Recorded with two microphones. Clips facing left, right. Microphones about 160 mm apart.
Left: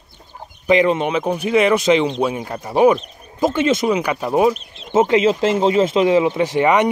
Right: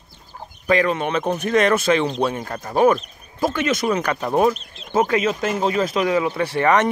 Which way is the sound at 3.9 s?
10° left (ahead or behind).